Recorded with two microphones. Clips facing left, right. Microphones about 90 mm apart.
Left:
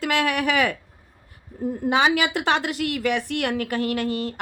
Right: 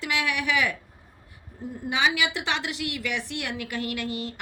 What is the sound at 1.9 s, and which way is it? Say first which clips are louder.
A woman's voice: left 5 dB; 45° left (ahead or behind).